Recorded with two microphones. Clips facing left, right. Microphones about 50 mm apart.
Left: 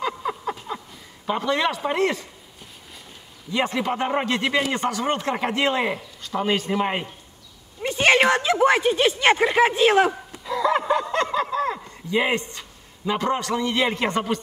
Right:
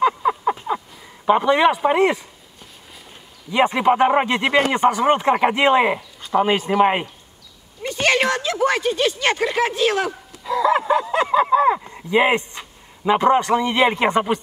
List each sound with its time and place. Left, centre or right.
0.0 s a sound: centre
1.2 s speech: right
3.5 s speech: right
7.8 s speech: left
10.4 s a sound: centre
11.4 s speech: centre